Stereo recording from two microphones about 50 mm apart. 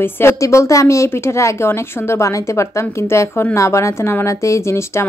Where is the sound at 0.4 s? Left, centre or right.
Left.